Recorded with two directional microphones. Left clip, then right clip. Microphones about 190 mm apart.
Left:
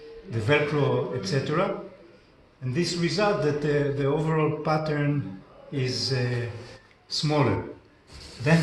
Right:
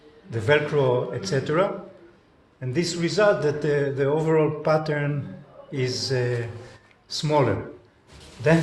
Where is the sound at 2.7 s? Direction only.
55° right (ahead or behind).